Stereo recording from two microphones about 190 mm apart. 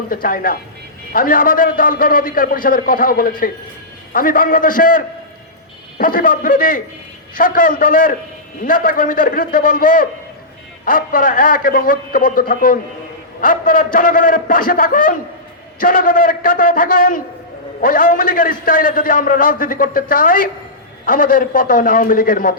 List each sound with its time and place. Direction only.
0.1 s a man's voice: 50° left (ahead or behind)